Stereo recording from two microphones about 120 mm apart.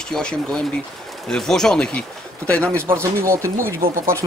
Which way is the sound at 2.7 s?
20° right (ahead or behind).